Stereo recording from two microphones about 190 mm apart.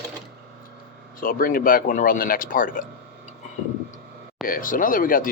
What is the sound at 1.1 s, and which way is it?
Speech, 50° left (ahead or behind).